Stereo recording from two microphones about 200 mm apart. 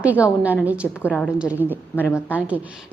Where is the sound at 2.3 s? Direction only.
5° right (ahead or behind).